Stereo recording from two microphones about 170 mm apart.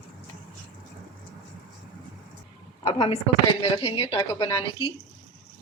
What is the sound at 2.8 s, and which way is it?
Speech, 35° left (ahead or behind).